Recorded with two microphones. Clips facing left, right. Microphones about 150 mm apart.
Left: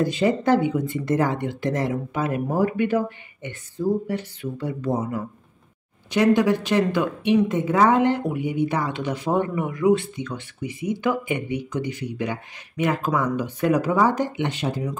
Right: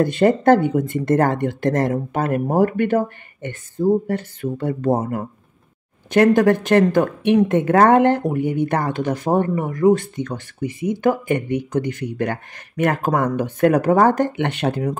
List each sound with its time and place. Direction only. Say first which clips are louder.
0.0 s a woman's voice: right 5 dB; 55° right (ahead or behind)